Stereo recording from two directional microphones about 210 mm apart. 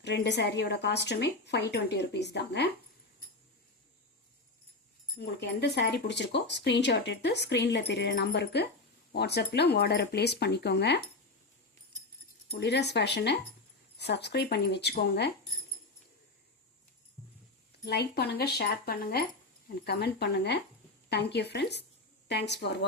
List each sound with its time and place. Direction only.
0.0 s a woman's voice: 55° left (ahead or behind)
5.2 s a woman's voice: 50° left (ahead or behind)
12.5 s a woman's voice: 55° left (ahead or behind)
17.8 s a woman's voice: 50° left (ahead or behind)